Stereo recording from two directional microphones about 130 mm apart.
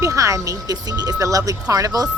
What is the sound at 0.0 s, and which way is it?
Speech, 25° right (ahead or behind).